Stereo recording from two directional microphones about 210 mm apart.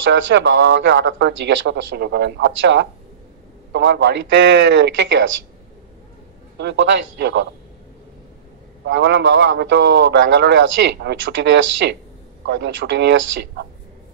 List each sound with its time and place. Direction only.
0.0 s a man's voice: 60° right (ahead or behind)
6.6 s a man's voice: 60° right (ahead or behind)
8.8 s a man's voice: 55° right (ahead or behind)